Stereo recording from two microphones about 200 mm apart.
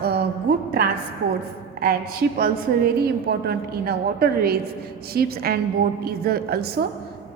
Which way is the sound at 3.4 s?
55° right (ahead or behind).